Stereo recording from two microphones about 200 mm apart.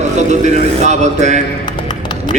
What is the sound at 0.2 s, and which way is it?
A man's voice, 35° right (ahead or behind).